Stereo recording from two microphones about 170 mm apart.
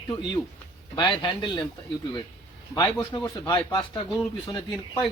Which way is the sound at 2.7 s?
20° left (ahead or behind).